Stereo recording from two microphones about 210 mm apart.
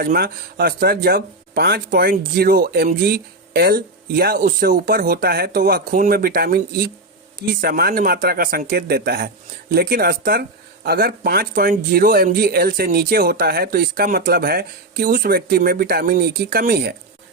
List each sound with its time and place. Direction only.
0.0 s speech: 45° right (ahead or behind)